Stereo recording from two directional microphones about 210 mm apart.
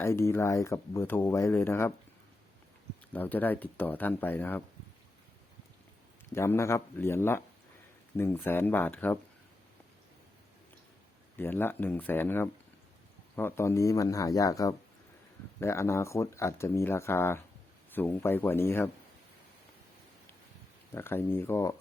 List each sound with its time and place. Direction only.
0.0 s speech: 10° left (ahead or behind)
3.1 s speech: 10° left (ahead or behind)
6.3 s speech: 10° left (ahead or behind)
11.3 s speech: 10° left (ahead or behind)
20.9 s speech: 10° left (ahead or behind)